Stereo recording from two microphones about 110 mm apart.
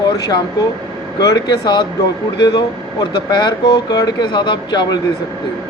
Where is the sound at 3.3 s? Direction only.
40° left (ahead or behind).